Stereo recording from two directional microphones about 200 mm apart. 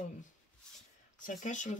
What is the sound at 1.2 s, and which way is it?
Speech, 40° left (ahead or behind).